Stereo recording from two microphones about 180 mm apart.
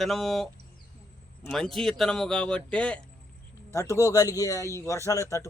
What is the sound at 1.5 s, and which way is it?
A man's voice, centre (ahead or behind).